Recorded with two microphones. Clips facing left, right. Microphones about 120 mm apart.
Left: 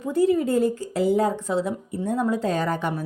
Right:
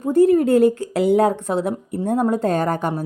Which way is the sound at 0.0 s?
50° right (ahead or behind).